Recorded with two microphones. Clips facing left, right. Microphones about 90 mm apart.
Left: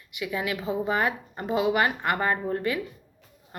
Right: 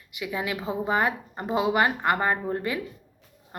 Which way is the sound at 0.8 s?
25° right (ahead or behind).